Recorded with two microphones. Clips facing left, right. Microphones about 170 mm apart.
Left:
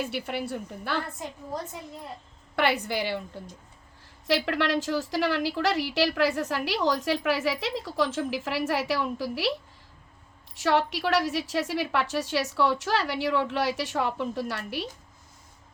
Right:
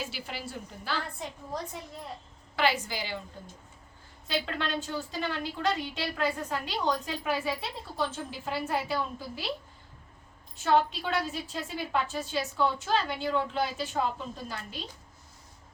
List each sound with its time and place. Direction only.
0.0 s a woman's voice: 60° left (ahead or behind)
2.6 s a woman's voice: 60° left (ahead or behind); by 9.5 s 90° left
10.5 s a woman's voice: 85° left